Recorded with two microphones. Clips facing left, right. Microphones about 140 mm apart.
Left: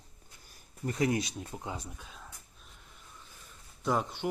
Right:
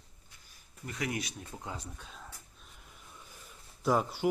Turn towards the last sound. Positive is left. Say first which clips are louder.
# right 2 dB
turn(degrees=-5)  # may be behind; listen again after turning